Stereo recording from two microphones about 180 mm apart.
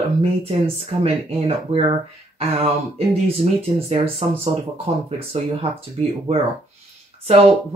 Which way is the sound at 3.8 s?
35° right (ahead or behind).